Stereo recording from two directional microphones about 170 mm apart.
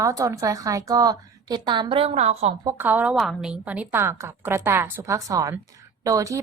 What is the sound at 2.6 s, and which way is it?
Speech, 20° right (ahead or behind).